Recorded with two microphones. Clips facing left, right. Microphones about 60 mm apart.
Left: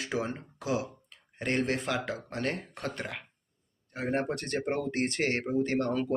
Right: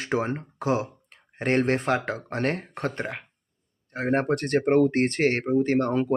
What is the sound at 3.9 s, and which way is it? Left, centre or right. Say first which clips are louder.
Speech: right 7 dB; right.